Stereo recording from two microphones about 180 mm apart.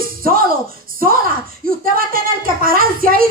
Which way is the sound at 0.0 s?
55° right (ahead or behind).